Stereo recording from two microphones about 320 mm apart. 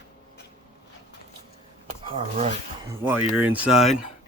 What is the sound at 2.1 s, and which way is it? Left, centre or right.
Speech, right.